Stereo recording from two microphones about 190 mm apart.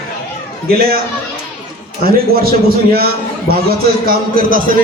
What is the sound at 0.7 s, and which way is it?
Speech, 50° right (ahead or behind).